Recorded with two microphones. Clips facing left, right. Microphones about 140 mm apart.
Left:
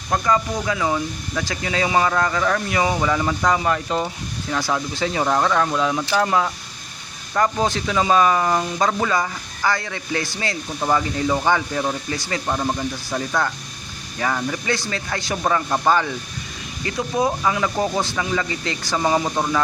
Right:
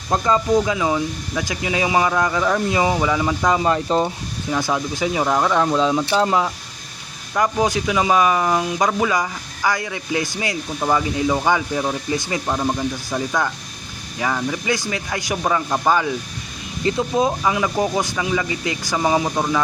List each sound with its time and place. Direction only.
0.1 s speech: 25° right (ahead or behind)
3.0 s speech: 10° right (ahead or behind)
3.4 s speech: 20° right (ahead or behind)
4.5 s speech: 15° right (ahead or behind)
7.3 s speech: 10° right (ahead or behind)
16.8 s speech: 25° right (ahead or behind); by 19.6 s 5° right (ahead or behind)